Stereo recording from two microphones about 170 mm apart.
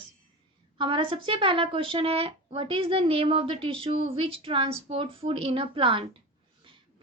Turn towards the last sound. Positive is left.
turn(degrees=-30)  # may be behind; listen again after turning